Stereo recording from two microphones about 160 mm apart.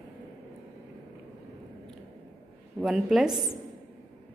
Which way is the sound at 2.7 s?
5° right (ahead or behind).